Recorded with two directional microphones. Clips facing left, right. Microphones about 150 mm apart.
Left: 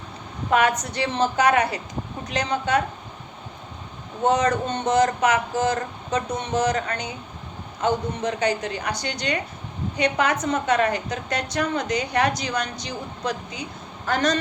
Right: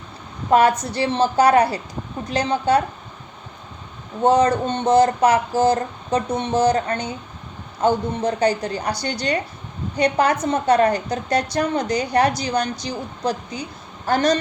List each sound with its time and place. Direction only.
0.5 s a woman's voice: 35° right (ahead or behind)
4.2 s a woman's voice: 30° right (ahead or behind)